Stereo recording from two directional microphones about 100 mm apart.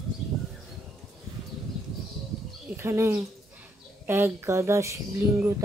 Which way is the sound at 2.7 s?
25° right (ahead or behind).